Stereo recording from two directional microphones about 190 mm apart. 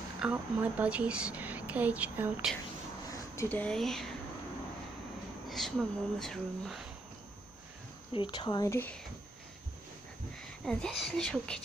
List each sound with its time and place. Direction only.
0.2 s a woman's voice: 10° right (ahead or behind)
3.1 s speech: 10° left (ahead or behind)
5.5 s speech: centre (ahead or behind)
8.1 s speech: 25° left (ahead or behind)
10.6 s speech: 5° left (ahead or behind)